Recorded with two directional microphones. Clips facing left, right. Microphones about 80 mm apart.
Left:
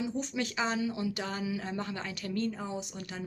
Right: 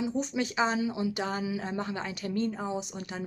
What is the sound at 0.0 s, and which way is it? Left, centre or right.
Speech, right.